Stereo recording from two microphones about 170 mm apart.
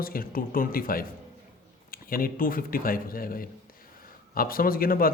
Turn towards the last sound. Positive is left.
turn(degrees=60)  # may be behind; listen again after turning